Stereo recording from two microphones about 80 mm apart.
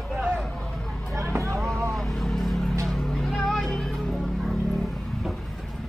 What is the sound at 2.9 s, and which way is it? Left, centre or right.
Music, centre.